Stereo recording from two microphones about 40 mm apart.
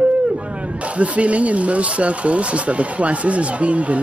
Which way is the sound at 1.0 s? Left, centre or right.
Right.